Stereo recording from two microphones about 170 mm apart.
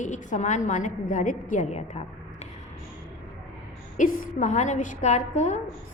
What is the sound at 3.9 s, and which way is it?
A woman's voice, 50° left (ahead or behind).